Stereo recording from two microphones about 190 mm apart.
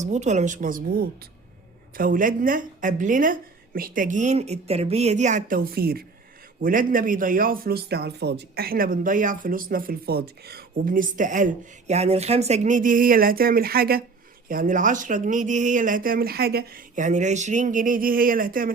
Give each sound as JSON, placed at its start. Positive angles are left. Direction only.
{"t": 0.0, "sound": "a woman's voice", "side_deg": -40}
{"t": 16.9, "sound": "speech", "side_deg": -40}